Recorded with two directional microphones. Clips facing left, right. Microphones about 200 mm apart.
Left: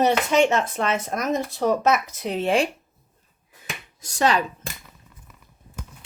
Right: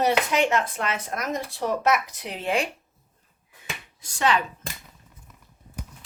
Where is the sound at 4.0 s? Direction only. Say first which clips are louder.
Left 2 dB; 40° left (ahead or behind).